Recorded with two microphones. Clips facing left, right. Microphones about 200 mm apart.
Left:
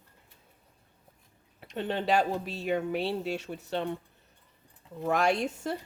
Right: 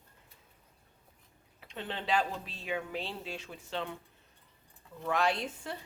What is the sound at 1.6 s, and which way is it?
Speech, 45° left (ahead or behind).